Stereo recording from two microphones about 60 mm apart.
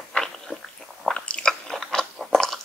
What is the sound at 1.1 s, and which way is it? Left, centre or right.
Biting, centre.